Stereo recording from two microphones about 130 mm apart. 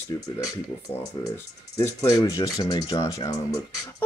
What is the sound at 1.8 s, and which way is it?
Speech, 25° left (ahead or behind).